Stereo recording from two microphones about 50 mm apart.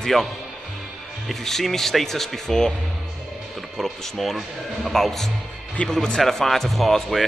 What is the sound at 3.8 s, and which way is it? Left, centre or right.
A man's voice, centre.